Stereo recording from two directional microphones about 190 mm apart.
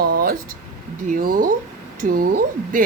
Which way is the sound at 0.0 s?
50° right (ahead or behind).